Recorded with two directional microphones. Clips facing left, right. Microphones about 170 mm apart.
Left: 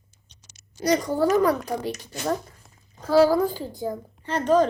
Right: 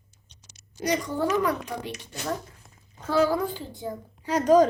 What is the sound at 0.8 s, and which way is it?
A child's voice, 35° left (ahead or behind).